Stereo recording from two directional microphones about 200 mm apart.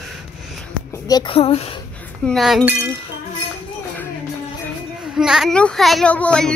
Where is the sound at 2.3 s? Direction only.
Centre (ahead or behind).